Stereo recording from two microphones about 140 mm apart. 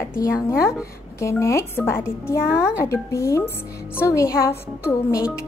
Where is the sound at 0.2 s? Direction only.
20° left (ahead or behind).